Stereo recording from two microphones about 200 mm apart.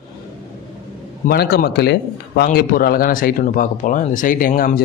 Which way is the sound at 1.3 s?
55° left (ahead or behind).